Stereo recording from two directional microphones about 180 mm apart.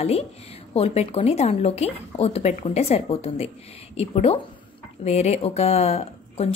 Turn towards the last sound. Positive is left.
turn(degrees=35)  # may be behind; listen again after turning